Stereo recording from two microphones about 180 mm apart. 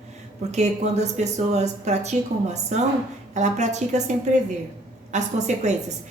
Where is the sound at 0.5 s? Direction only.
40° right (ahead or behind).